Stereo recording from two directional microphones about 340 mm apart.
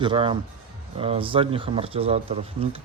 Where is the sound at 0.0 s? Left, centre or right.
Centre.